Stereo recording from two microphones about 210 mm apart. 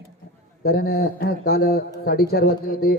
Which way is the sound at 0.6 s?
50° left (ahead or behind).